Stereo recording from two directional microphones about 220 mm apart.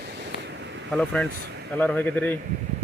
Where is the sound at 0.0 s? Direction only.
50° right (ahead or behind).